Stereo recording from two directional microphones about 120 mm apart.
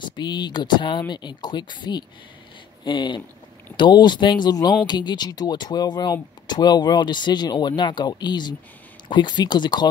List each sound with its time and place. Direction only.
0.0 s speech: 40° left (ahead or behind)